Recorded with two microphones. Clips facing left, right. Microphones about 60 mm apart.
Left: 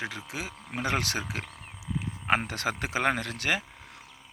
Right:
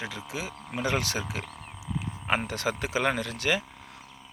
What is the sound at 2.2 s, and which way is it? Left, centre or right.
Speech, left.